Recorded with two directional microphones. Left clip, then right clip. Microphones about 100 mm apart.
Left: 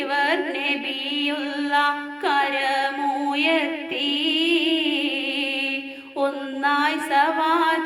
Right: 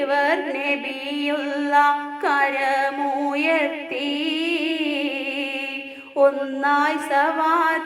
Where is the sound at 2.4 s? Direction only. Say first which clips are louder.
Right 2 dB; 25° left (ahead or behind).